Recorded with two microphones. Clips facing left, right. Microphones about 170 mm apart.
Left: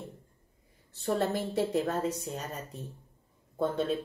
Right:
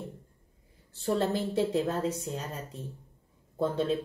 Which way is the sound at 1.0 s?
30° right (ahead or behind).